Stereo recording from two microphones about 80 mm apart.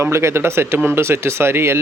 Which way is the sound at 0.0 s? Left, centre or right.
Right.